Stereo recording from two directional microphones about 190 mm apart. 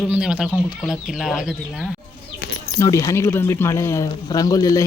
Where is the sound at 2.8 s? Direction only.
15° left (ahead or behind).